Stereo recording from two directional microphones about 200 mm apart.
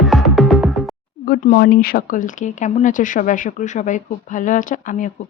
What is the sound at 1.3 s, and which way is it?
Speech, 50° left (ahead or behind).